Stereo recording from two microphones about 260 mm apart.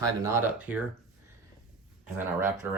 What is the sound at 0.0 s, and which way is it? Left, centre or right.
Speech, centre.